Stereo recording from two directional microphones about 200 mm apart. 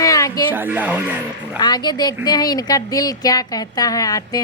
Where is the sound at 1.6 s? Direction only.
20° left (ahead or behind).